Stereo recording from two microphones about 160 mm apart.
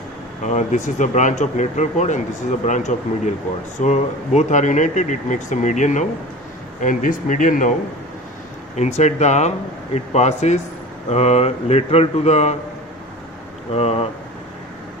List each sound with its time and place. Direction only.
0.4 s speech: 50° left (ahead or behind)
8.7 s speech: 45° left (ahead or behind)
13.7 s speech: 40° left (ahead or behind)